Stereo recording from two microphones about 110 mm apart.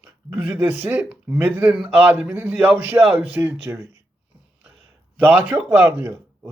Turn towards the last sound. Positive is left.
turn(degrees=-20)  # may be behind; listen again after turning